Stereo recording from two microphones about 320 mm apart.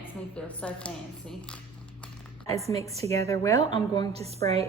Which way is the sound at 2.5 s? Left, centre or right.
Centre.